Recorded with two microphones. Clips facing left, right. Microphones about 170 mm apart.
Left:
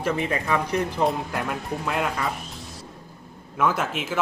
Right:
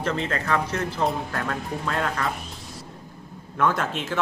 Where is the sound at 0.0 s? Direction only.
10° left (ahead or behind).